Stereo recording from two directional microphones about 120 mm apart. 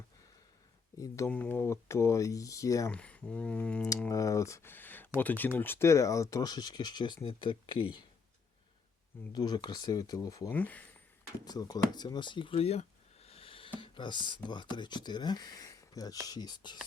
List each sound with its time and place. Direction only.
0.9 s speech: 25° left (ahead or behind)
1.3 s speech: 15° left (ahead or behind)
2.9 s speech: 10° left (ahead or behind)
4.1 s speech: 25° left (ahead or behind)
7.2 s speech: 45° left (ahead or behind)
9.3 s speech: 35° left (ahead or behind)
10.5 s speech: 15° left (ahead or behind)
11.3 s speech: 35° left (ahead or behind); by 13.7 s 50° left (ahead or behind)
13.7 s a sound: 45° left (ahead or behind)
14.4 s speech: 40° left (ahead or behind)